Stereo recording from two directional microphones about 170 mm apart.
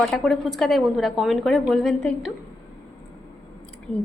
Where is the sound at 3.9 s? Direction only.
5° left (ahead or behind).